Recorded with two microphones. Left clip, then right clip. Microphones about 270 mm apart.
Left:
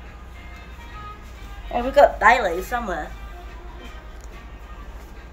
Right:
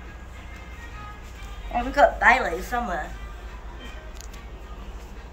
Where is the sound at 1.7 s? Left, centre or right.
Left.